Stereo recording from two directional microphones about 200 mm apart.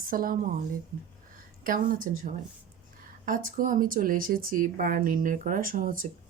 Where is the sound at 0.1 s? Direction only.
45° right (ahead or behind).